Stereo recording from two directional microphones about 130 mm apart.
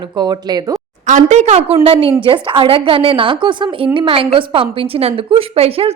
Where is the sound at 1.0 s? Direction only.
70° right (ahead or behind).